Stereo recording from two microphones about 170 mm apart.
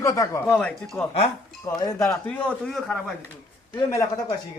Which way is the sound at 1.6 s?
20° left (ahead or behind).